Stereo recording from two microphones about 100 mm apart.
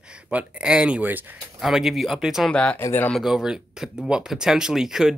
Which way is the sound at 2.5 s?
10° left (ahead or behind).